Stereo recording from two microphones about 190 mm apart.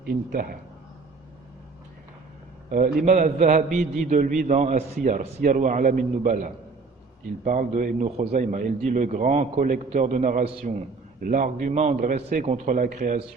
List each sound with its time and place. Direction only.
0.0 s a man's voice: 50° right (ahead or behind)
2.6 s a man's voice: 40° right (ahead or behind)